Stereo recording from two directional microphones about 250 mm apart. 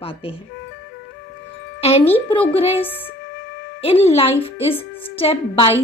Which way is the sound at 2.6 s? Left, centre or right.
Left.